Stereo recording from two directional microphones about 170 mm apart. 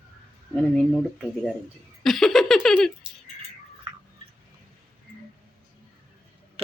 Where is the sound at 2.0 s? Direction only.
Centre (ahead or behind).